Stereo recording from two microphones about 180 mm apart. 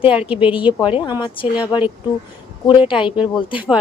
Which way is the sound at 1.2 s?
25° left (ahead or behind).